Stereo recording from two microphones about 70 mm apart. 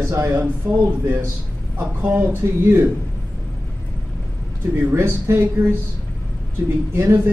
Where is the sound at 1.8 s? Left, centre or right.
Right.